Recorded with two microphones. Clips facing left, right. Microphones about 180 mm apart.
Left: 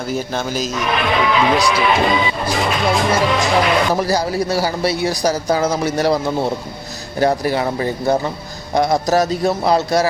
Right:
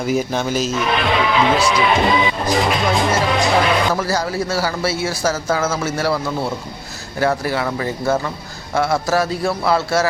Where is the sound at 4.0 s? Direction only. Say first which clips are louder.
Left 3 dB; 15° left (ahead or behind).